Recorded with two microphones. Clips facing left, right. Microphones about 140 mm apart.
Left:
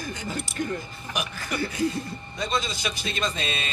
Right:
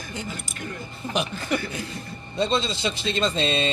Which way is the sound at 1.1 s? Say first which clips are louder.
Right 6 dB; 25° right (ahead or behind).